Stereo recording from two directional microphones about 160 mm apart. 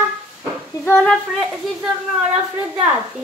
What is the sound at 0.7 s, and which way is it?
Speech, 15° left (ahead or behind).